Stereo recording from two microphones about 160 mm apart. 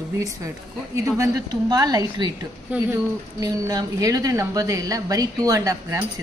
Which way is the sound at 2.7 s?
10° right (ahead or behind).